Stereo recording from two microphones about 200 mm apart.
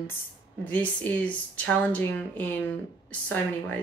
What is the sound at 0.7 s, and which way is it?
Speech, 5° left (ahead or behind).